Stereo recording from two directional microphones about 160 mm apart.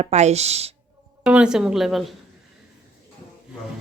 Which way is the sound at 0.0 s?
45° right (ahead or behind).